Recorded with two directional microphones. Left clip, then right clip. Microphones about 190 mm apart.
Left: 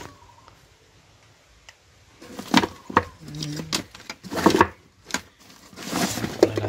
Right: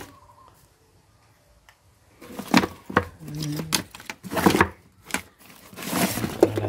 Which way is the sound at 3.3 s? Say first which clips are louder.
Right 1 dB; 20° right (ahead or behind).